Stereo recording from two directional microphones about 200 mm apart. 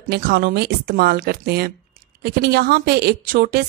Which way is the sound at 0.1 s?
50° right (ahead or behind).